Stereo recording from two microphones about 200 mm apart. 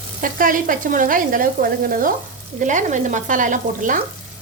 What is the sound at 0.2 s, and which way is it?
Sizzle, 45° right (ahead or behind).